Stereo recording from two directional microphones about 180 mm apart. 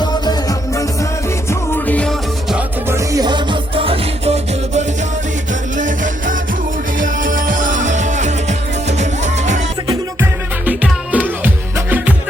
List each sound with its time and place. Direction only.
0.0 s music: 20° left (ahead or behind)
1.5 s music: 10° left (ahead or behind)
2.9 s music: 20° right (ahead or behind); by 9.6 s 40° right (ahead or behind)
9.8 s music: 20° right (ahead or behind)
10.7 s music: 10° right (ahead or behind)